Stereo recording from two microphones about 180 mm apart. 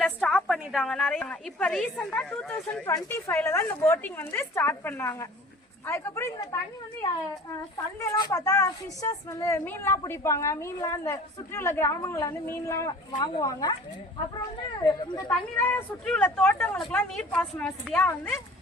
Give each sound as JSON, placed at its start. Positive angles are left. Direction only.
{"t": 0.0, "sound": "a woman's voice", "side_deg": 5}
{"t": 8.0, "sound": "a woman's voice", "side_deg": 15}
{"t": 14.8, "sound": "speech", "side_deg": 20}
{"t": 15.3, "sound": "a woman's voice", "side_deg": 10}